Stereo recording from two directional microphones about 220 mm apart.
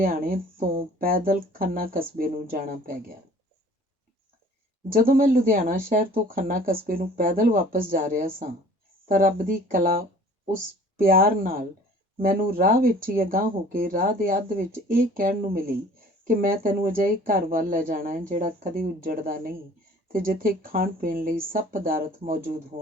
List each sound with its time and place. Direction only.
0.0 s speech: 40° right (ahead or behind)
4.9 s speech: 40° right (ahead or behind)